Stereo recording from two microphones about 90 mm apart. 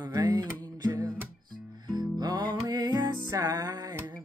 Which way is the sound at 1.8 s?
50° right (ahead or behind).